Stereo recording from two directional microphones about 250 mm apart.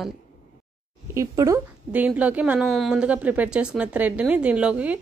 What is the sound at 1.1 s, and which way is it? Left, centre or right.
A woman's voice, centre.